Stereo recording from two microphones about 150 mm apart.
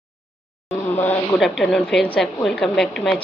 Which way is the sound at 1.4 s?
5° left (ahead or behind).